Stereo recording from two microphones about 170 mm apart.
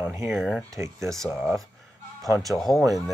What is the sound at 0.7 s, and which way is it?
Speech, 15° right (ahead or behind).